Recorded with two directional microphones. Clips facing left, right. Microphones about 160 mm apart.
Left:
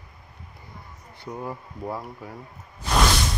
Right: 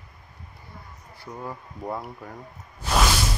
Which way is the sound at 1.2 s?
10° left (ahead or behind).